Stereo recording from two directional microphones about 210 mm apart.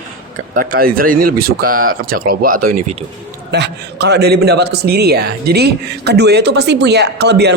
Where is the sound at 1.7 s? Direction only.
90° right.